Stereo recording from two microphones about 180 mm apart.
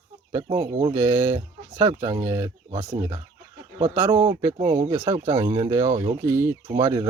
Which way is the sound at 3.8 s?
15° right (ahead or behind).